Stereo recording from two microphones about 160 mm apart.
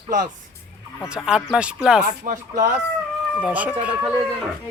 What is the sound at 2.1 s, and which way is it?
Speech, 50° right (ahead or behind).